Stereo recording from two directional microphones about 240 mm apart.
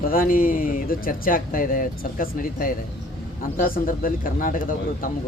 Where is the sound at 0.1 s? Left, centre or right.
Left.